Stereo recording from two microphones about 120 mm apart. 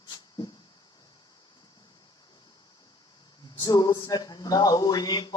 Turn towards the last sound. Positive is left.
turn(degrees=35)  # may be behind; listen again after turning